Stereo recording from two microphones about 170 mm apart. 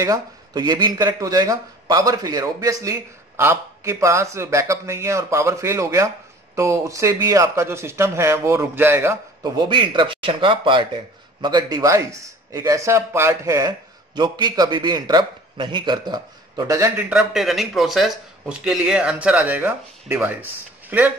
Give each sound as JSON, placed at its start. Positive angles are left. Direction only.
{"t": 0.0, "sound": "speech", "side_deg": -20}
{"t": 9.6, "sound": "a man's voice", "side_deg": -30}
{"t": 16.9, "sound": "speech", "side_deg": -5}